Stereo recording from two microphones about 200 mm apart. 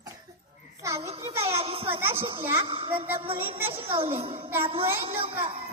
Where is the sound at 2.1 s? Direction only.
25° right (ahead or behind).